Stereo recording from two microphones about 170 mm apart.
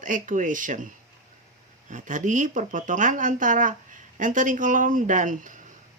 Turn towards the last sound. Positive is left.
turn(degrees=-50)  # may be behind; listen again after turning